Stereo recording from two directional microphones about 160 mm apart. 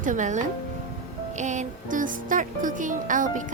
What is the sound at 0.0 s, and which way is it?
Speech, 50° right (ahead or behind).